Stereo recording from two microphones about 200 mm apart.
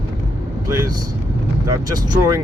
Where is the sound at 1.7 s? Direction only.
20° right (ahead or behind).